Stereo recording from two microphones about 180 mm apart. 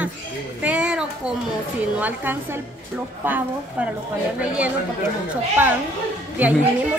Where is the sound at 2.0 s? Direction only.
10° right (ahead or behind).